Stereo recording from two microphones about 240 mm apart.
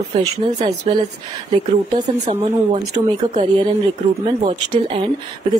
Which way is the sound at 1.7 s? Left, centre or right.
Right.